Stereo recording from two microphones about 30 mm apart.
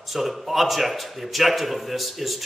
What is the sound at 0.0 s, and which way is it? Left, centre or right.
A man's voice, centre.